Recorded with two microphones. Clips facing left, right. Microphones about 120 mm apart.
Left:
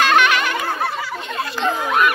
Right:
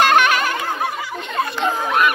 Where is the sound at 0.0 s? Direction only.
45° right (ahead or behind).